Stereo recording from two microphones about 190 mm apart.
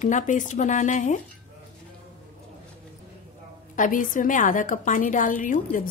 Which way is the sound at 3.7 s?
45° left (ahead or behind).